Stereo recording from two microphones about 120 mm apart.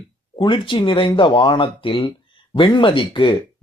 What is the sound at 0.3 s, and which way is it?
Speech, 45° left (ahead or behind).